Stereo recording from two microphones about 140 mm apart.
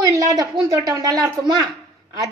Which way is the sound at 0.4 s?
25° right (ahead or behind).